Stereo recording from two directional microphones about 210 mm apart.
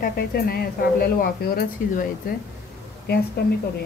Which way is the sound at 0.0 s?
45° left (ahead or behind).